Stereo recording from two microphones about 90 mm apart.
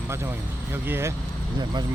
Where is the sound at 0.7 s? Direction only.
25° right (ahead or behind).